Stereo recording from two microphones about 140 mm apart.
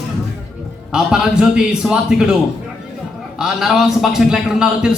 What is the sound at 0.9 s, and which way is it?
Speech, 5° right (ahead or behind).